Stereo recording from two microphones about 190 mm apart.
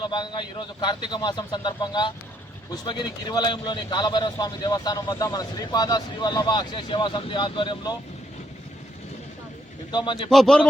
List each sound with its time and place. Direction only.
0.0 s a man's voice: 25° left (ahead or behind)
9.9 s a man's voice: 25° left (ahead or behind)
10.2 s a man's voice: centre (ahead or behind)